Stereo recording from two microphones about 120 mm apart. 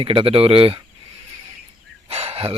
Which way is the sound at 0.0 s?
45° right (ahead or behind).